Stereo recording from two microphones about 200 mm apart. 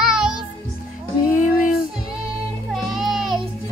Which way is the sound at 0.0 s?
5° right (ahead or behind).